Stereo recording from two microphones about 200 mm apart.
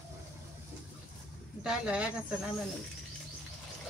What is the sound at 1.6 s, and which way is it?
Speech, 5° right (ahead or behind).